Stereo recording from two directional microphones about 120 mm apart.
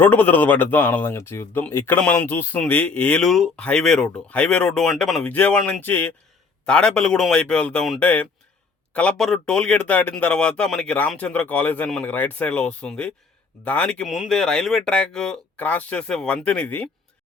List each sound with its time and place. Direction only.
0.0 s speech: 15° left (ahead or behind)
5.2 s speech: 10° left (ahead or behind)